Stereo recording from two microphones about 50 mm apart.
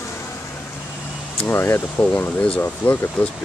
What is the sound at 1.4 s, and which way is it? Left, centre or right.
Speech, left.